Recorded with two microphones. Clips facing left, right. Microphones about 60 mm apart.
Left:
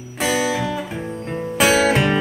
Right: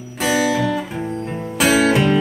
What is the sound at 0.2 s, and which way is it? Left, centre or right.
Music, centre.